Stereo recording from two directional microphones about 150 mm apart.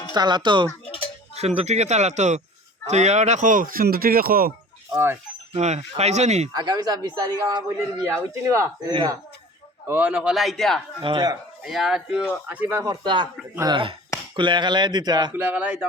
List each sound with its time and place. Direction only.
0.1 s speech: 30° right (ahead or behind)
1.4 s speech: 45° right (ahead or behind); by 4.5 s 80° right
5.5 s speech: 50° right (ahead or behind)
6.5 s speech: 25° right (ahead or behind)
9.8 s a man's voice: 15° right (ahead or behind); by 10.8 s centre (ahead or behind)
11.0 s speech: 30° right (ahead or behind)
11.6 s a man's voice: 5° right (ahead or behind)
12.5 s speech: 15° right (ahead or behind)
15.3 s speech: 10° right (ahead or behind)